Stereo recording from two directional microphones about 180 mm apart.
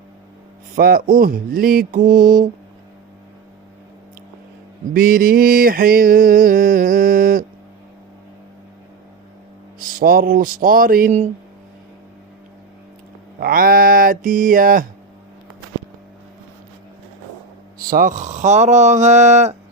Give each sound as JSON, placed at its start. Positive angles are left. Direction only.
{"t": 0.8, "sound": "mantra", "side_deg": -55}
{"t": 4.9, "sound": "mantra", "side_deg": -55}
{"t": 9.7, "sound": "mantra", "side_deg": -55}
{"t": 13.4, "sound": "mantra", "side_deg": -50}
{"t": 17.8, "sound": "speech", "side_deg": -50}